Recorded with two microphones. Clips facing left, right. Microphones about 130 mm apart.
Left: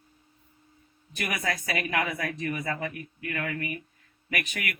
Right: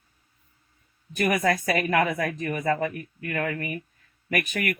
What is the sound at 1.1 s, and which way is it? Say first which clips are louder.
A woman's voice: right 8 dB; 45° right (ahead or behind).